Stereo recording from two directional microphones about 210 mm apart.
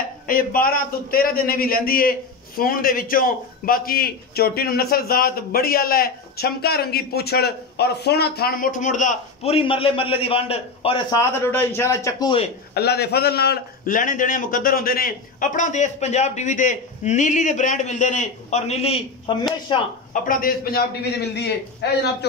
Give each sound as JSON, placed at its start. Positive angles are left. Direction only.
{"t": 0.3, "sound": "a man's voice", "side_deg": 40}
{"t": 12.7, "sound": "a man's voice", "side_deg": 50}
{"t": 20.1, "sound": "a man's voice", "side_deg": 40}